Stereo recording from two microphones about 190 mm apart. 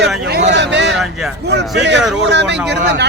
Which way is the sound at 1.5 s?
65° right (ahead or behind).